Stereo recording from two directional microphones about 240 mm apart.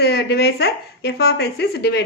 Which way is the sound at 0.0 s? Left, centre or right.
Left.